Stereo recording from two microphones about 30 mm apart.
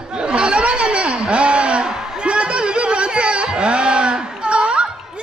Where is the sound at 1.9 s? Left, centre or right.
Right.